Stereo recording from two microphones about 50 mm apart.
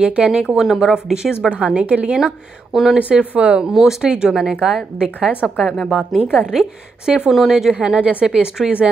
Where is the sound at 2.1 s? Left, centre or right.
Centre.